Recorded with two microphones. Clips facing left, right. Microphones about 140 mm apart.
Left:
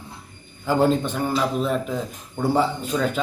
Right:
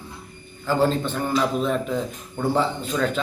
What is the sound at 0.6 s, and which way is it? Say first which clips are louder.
A man's voice: left 2 dB; 15° left (ahead or behind).